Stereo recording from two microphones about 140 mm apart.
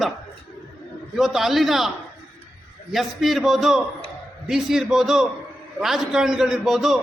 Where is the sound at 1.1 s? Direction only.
Centre (ahead or behind).